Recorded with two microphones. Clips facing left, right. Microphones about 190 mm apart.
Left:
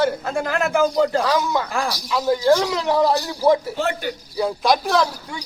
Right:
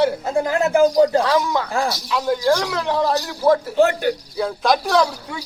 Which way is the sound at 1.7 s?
20° right (ahead or behind).